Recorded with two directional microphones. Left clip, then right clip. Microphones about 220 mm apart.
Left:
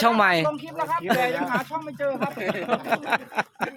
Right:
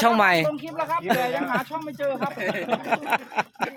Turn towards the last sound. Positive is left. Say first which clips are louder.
# right 1 dB
turn(degrees=10)  # may be behind; listen again after turning